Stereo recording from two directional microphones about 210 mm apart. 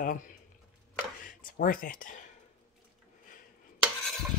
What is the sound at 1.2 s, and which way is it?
Speech, 40° left (ahead or behind).